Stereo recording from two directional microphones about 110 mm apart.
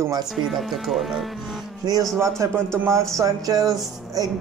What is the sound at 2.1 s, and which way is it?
A man's voice, 25° right (ahead or behind).